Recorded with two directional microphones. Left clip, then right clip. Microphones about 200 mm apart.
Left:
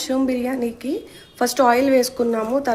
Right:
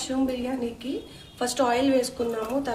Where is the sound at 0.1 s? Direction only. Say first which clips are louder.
Left 6 dB; 40° left (ahead or behind).